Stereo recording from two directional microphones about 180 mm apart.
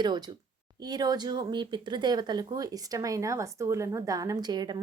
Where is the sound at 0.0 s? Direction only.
25° right (ahead or behind).